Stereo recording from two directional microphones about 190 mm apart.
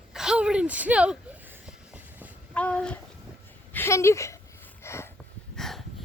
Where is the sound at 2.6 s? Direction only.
5° left (ahead or behind).